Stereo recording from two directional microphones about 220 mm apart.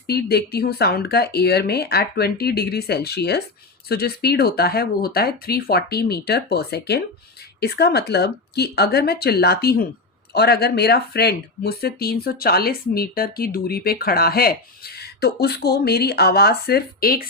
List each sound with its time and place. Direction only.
0.1 s speech: 45° left (ahead or behind)